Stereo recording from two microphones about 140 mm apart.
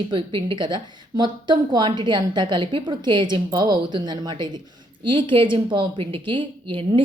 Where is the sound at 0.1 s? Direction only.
35° right (ahead or behind).